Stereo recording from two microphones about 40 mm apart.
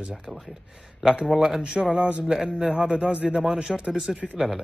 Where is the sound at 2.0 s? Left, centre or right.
Right.